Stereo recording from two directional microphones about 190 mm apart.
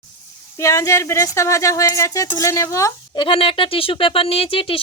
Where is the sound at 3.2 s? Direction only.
30° left (ahead or behind).